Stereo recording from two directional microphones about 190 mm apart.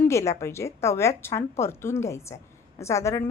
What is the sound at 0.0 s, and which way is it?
A woman's voice, 15° left (ahead or behind).